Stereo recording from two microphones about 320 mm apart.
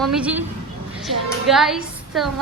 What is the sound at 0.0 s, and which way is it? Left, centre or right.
A woman's voice, centre.